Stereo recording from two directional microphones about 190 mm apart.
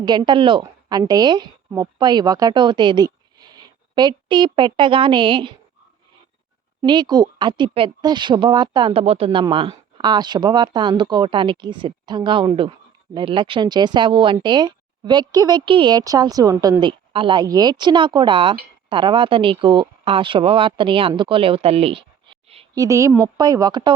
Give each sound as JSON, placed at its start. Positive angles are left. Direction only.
{"t": 0.0, "sound": "a woman's voice", "side_deg": -25}
{"t": 6.8, "sound": "speech", "side_deg": -20}
{"t": 22.7, "sound": "speech", "side_deg": -15}